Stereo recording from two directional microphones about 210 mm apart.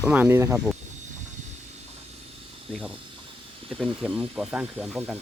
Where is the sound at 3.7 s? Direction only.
Centre (ahead or behind).